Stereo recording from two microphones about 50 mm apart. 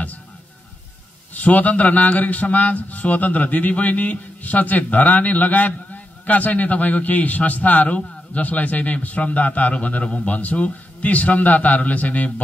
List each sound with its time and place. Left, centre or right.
1.3 s a man's voice: left